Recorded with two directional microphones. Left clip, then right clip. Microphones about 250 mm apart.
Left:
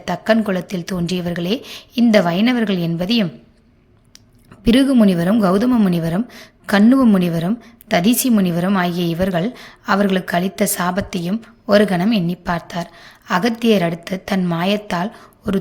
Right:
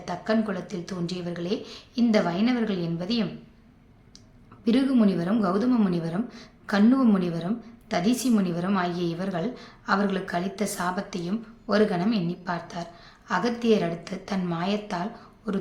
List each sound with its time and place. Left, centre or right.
0.0 s a woman's voice: left
4.6 s a woman's voice: left